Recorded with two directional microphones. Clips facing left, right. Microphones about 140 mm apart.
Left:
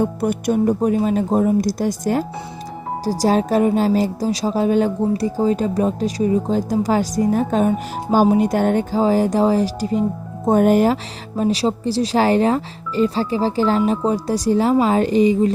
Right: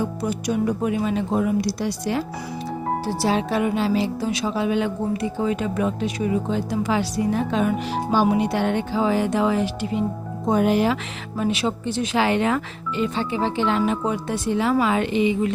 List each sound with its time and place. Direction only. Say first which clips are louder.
0.0 s speech: left 5 dB; 55° left (ahead or behind); by 15.5 s 40° left (ahead or behind)